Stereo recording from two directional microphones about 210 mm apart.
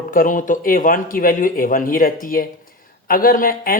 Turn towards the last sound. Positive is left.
turn(degrees=40)  # may be behind; listen again after turning